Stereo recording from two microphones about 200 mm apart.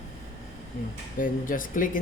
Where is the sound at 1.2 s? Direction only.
40° left (ahead or behind).